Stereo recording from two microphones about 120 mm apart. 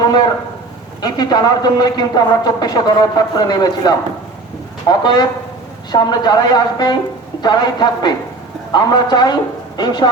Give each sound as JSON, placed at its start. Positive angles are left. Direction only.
{"t": 1.0, "sound": "a man's voice", "side_deg": 35}